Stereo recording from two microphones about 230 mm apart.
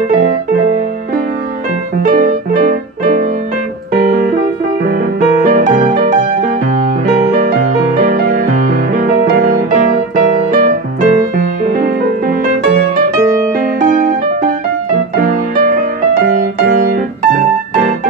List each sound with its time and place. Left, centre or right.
2.0 s music: right
5.4 s music: right
7.6 s music: right
13.6 s music: right
16.6 s piano: right